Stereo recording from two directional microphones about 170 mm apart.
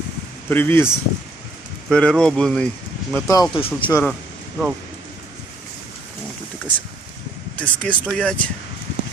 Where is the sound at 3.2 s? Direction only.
20° left (ahead or behind).